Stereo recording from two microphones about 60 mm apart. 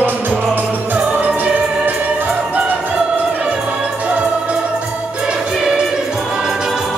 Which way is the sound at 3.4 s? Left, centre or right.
Centre.